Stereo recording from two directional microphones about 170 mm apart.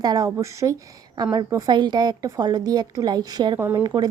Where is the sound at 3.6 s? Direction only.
10° right (ahead or behind).